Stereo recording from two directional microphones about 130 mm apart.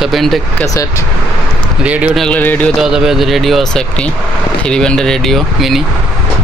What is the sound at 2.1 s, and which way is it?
Speech, 10° left (ahead or behind).